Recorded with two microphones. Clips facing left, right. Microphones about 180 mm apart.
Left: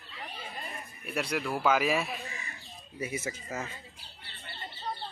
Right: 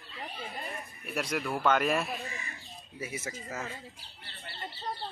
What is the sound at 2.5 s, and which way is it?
Bird, centre (ahead or behind).